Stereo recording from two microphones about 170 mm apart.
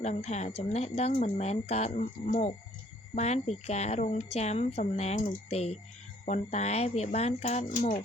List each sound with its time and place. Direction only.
0.0 s speech: 40° left (ahead or behind)